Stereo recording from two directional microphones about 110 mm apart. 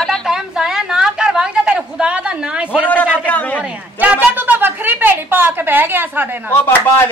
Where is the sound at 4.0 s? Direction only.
15° right (ahead or behind).